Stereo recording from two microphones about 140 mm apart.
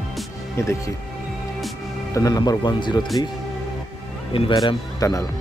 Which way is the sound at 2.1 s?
25° left (ahead or behind).